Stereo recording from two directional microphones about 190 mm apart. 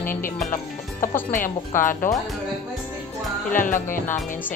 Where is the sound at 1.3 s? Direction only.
45° left (ahead or behind).